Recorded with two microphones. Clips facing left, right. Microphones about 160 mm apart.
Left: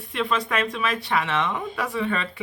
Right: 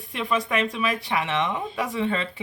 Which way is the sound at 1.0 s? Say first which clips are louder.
Left 1 dB; 15° right (ahead or behind).